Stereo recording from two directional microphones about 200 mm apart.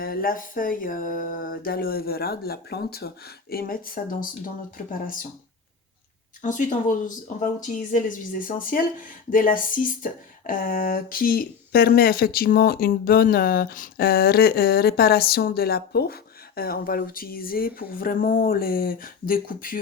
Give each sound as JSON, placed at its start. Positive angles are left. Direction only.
{"t": 0.0, "sound": "speech", "side_deg": 45}
{"t": 6.4, "sound": "speech", "side_deg": 40}